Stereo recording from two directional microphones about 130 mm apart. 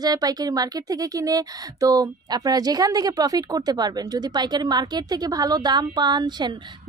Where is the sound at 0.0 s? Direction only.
30° right (ahead or behind).